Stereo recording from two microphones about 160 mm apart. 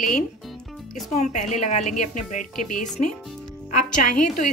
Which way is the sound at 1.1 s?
50° left (ahead or behind).